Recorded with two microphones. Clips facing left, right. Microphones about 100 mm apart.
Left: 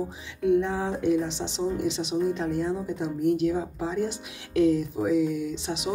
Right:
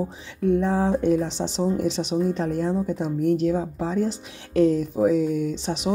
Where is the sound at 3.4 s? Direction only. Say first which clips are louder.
Right 3 dB; 35° right (ahead or behind).